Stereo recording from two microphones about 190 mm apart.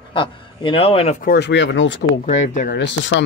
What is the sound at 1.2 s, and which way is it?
Speech, 60° left (ahead or behind).